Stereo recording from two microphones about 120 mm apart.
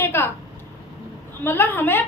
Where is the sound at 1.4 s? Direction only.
20° left (ahead or behind).